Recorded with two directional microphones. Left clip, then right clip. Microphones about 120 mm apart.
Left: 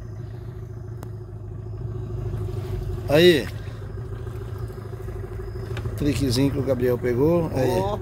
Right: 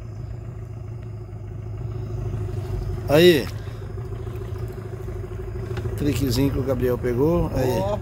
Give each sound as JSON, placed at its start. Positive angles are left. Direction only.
{"t": 3.1, "sound": "speech", "side_deg": 0}
{"t": 5.9, "sound": "speech", "side_deg": 30}